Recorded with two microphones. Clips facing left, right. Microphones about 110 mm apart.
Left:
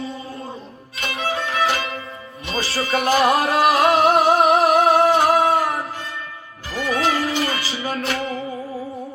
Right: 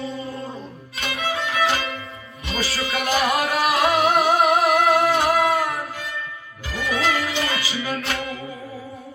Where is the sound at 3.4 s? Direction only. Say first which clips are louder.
Left 4 dB; 30° left (ahead or behind).